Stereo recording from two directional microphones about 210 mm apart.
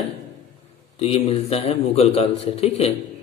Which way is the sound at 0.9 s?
30° left (ahead or behind).